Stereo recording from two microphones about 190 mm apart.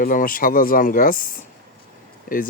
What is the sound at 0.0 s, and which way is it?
Speech, 45° left (ahead or behind).